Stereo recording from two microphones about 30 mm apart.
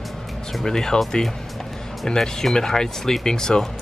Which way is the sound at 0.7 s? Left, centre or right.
Centre.